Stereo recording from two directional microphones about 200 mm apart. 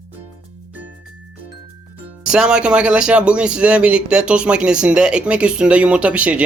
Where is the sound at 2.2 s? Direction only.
5° right (ahead or behind).